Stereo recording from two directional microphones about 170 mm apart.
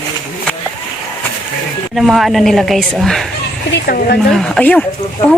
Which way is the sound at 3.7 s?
65° left (ahead or behind).